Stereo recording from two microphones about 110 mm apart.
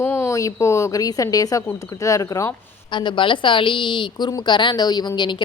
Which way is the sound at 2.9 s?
45° left (ahead or behind).